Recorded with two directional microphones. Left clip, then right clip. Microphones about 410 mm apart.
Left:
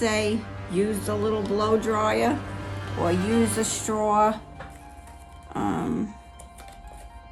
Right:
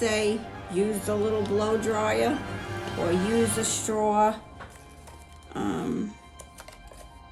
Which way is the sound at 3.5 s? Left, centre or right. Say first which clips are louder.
Left 1 dB; centre.